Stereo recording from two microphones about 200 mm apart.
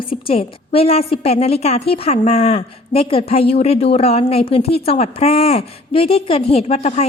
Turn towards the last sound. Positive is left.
turn(degrees=30)  # may be behind; listen again after turning